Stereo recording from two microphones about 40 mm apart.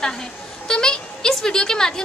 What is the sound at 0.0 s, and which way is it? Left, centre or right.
A woman's voice, centre.